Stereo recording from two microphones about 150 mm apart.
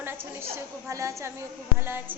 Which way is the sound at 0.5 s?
20° right (ahead or behind).